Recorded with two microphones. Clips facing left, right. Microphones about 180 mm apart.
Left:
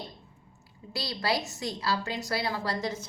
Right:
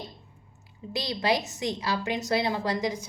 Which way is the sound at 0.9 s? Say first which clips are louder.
Right 3 dB; 20° right (ahead or behind).